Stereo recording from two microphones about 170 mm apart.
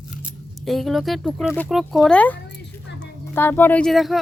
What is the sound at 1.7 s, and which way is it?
Speech, centre (ahead or behind).